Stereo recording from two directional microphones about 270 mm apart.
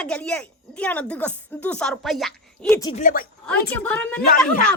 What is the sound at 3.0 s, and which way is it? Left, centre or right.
Speech, left.